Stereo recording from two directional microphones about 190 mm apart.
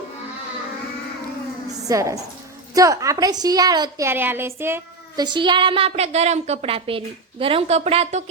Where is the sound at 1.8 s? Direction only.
15° right (ahead or behind).